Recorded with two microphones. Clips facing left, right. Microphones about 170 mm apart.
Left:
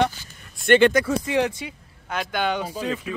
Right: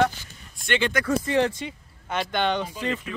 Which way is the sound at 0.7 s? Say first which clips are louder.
Left 10 dB; 55° left (ahead or behind).